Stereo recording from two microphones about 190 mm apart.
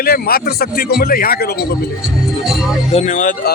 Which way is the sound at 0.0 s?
50° left (ahead or behind).